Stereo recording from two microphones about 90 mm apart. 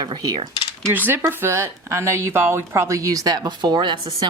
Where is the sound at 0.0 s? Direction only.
50° right (ahead or behind).